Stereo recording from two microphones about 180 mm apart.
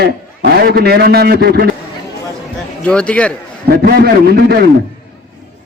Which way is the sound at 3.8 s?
60° right (ahead or behind).